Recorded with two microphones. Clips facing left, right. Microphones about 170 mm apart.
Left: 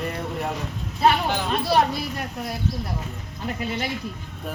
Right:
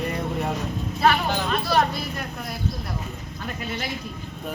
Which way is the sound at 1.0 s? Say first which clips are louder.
Left 1 dB; 15° left (ahead or behind).